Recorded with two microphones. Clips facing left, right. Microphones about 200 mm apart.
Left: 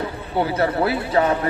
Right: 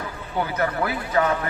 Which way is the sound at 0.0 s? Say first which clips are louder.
Left 5 dB; 30° left (ahead or behind).